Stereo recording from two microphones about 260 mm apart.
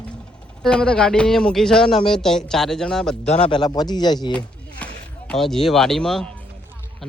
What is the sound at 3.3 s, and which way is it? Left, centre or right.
Speech, left.